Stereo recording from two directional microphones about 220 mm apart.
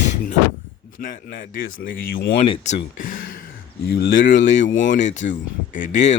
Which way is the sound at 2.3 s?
25° left (ahead or behind).